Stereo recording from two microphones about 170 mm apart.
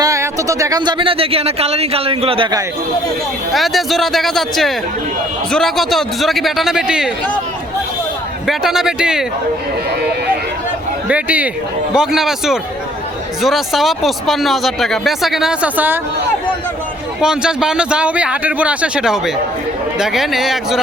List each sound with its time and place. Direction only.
0.0 s speech: 20° right (ahead or behind)
3.5 s speech: centre (ahead or behind)
8.4 s speech: centre (ahead or behind)
11.1 s speech: 10° right (ahead or behind)
17.2 s speech: 5° right (ahead or behind)